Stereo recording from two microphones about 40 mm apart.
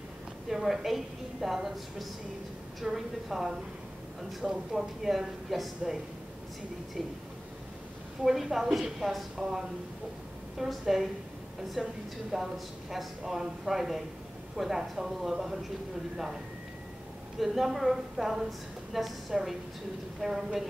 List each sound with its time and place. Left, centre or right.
0.5 s a woman's voice: centre
8.2 s a woman's voice: centre
17.4 s a woman's voice: centre
20.2 s a woman's voice: centre